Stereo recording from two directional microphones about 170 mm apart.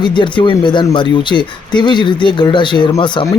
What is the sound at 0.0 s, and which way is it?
Speech, 25° left (ahead or behind).